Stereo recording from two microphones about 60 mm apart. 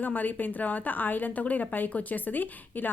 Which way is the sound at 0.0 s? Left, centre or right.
Left.